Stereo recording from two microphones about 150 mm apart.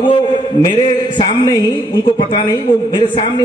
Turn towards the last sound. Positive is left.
turn(degrees=30)  # may be behind; listen again after turning